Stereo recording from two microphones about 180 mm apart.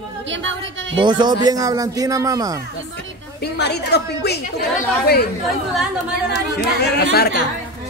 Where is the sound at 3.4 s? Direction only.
65° left (ahead or behind).